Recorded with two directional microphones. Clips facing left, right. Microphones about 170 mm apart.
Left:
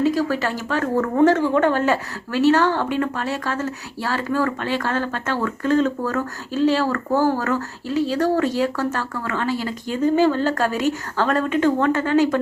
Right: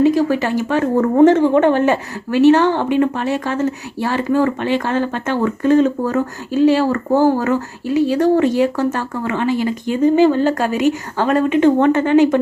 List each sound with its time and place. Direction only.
0.0 s speech: 15° right (ahead or behind)